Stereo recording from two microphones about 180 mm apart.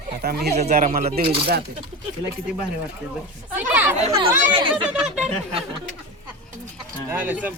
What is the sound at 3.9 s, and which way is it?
Speech, 35° right (ahead or behind).